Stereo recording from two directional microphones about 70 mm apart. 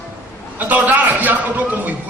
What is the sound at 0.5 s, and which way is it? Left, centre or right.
A man's voice, right.